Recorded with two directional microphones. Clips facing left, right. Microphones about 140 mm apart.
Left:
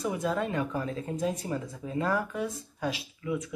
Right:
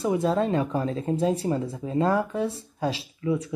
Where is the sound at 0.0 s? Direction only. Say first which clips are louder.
Right 6 dB; 30° right (ahead or behind).